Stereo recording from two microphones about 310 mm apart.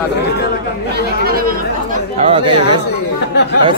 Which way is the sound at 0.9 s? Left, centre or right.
Right.